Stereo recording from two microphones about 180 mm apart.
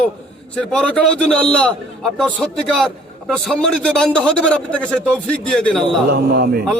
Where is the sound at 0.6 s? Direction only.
5° left (ahead or behind).